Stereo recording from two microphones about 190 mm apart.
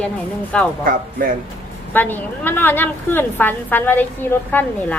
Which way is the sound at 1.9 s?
10° left (ahead or behind).